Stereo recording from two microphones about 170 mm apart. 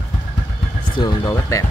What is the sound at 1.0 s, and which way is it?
Speech, 25° left (ahead or behind).